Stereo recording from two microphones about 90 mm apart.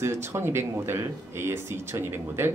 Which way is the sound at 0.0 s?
30° right (ahead or behind).